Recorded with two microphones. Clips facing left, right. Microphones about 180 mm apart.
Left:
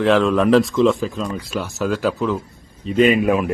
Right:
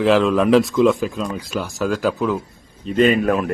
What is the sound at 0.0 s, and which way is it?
Speech, centre (ahead or behind).